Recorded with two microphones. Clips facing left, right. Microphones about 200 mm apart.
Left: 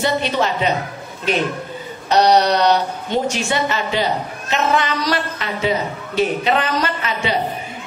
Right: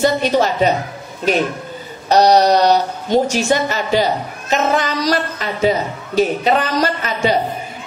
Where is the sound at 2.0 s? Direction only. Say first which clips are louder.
Right 3 dB; 40° right (ahead or behind).